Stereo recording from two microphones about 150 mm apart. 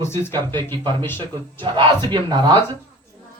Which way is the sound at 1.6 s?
30° right (ahead or behind).